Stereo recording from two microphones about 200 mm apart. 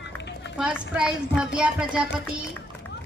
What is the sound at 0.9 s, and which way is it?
A child's voice, 5° right (ahead or behind).